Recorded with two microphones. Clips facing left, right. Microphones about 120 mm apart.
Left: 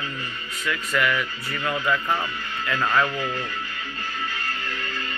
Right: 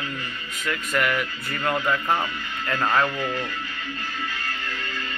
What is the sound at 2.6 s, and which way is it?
Speech, 40° right (ahead or behind).